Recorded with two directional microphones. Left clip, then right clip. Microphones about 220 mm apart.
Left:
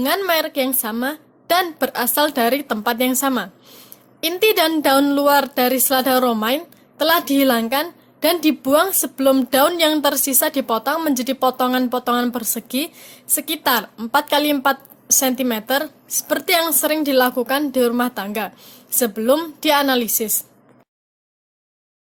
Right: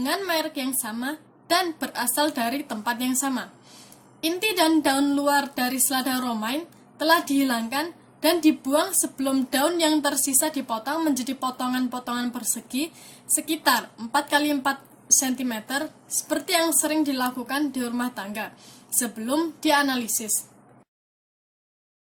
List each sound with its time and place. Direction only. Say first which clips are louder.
0.0 s a woman's voice: left 7 dB; 35° left (ahead or behind)